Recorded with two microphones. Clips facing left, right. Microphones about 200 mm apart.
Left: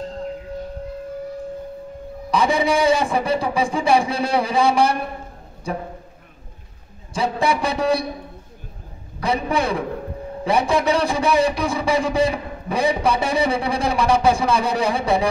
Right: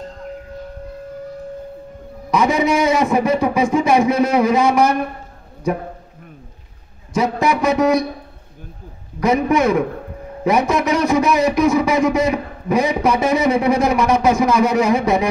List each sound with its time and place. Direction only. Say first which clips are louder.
2.3 s speech: right 2 dB; 30° left (ahead or behind)
7.2 s a man's voice: right 3 dB; 30° left (ahead or behind)
9.2 s speech: right 6 dB; 30° left (ahead or behind)